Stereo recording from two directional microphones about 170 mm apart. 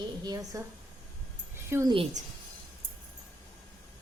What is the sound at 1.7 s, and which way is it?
Speech, 20° right (ahead or behind).